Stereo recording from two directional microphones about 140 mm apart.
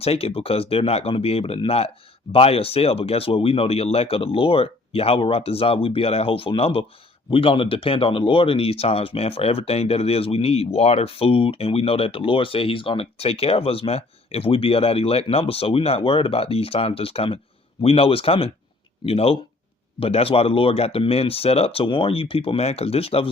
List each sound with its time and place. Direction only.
0.0 s speech: 45° left (ahead or behind)